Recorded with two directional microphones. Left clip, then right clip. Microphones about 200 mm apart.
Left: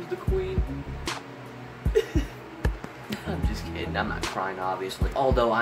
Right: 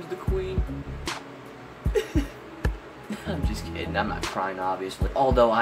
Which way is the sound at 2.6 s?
Centre (ahead or behind).